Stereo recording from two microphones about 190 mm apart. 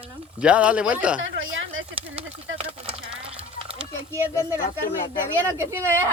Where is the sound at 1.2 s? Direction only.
90° right.